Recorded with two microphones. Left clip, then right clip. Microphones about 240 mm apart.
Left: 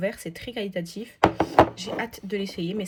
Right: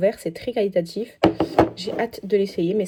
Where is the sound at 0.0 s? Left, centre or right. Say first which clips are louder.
Right 8 dB; centre.